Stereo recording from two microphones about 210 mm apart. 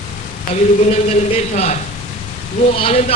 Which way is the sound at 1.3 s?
30° left (ahead or behind).